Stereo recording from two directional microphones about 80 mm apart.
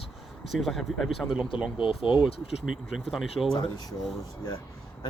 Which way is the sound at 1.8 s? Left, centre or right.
Left.